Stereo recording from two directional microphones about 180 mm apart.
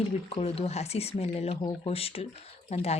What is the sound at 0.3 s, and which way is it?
Speech, 35° left (ahead or behind).